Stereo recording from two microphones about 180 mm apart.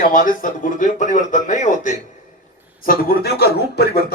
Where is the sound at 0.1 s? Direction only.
50° left (ahead or behind).